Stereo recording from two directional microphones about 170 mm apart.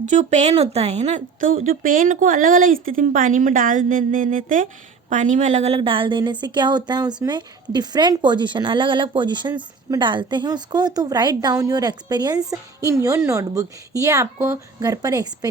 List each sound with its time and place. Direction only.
0.0 s a woman's voice: 45° right (ahead or behind); by 15.4 s 20° right (ahead or behind)